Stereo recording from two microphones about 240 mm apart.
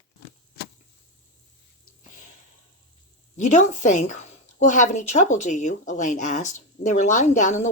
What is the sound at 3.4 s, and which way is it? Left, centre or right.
Speech, left.